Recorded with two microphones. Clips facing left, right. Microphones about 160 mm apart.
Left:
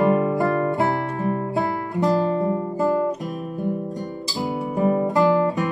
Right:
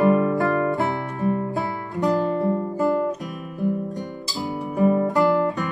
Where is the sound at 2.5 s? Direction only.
15° left (ahead or behind).